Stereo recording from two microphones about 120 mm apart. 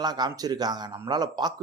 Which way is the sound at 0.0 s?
35° right (ahead or behind).